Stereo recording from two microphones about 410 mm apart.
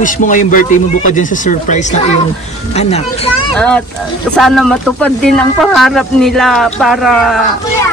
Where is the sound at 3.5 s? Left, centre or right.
Centre.